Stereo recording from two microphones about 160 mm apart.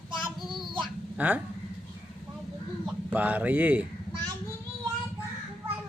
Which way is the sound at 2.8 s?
10° right (ahead or behind).